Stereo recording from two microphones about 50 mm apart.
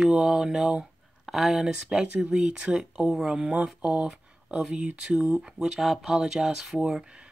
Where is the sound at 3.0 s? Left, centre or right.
Centre.